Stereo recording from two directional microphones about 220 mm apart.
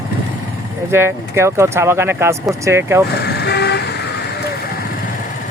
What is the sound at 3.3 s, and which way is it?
Vehicle, 50° left (ahead or behind).